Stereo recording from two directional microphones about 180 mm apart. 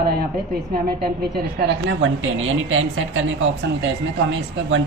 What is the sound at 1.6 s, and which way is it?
A woman's voice, 85° right.